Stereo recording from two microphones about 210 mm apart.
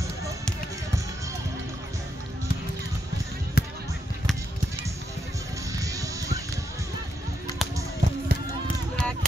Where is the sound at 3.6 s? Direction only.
50° left (ahead or behind).